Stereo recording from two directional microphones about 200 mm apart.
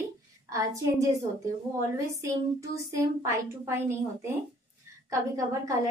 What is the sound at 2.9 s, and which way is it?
A woman's voice, 15° right (ahead or behind).